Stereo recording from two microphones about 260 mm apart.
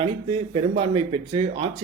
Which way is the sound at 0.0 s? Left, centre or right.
Right.